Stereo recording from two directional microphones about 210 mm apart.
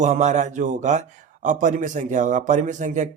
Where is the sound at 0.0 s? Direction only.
35° right (ahead or behind).